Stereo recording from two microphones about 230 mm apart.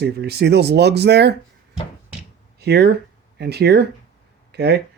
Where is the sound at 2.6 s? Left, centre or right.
Right.